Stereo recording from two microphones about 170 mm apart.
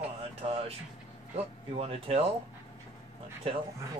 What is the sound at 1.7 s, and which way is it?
Speech, 35° right (ahead or behind).